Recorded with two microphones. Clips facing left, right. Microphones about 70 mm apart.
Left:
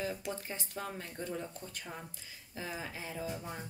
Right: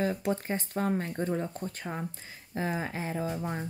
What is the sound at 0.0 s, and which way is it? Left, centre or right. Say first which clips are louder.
Speech: right 9 dB; right.